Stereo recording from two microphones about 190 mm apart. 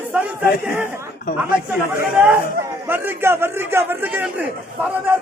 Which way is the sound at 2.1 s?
5° right (ahead or behind).